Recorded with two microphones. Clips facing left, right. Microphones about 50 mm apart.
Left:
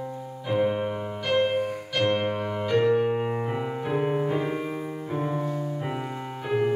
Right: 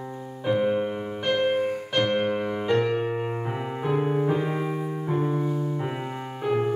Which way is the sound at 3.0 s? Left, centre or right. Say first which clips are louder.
Left 2 dB; centre.